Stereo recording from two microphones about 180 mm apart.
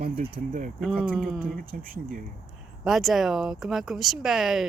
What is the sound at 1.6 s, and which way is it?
Speech, 50° right (ahead or behind).